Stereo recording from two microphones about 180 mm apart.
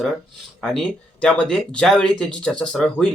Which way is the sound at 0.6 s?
5° left (ahead or behind).